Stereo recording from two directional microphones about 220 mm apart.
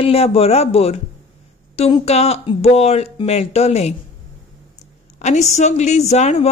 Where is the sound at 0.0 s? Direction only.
25° left (ahead or behind).